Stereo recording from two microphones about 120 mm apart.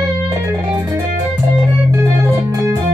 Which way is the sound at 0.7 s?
15° right (ahead or behind).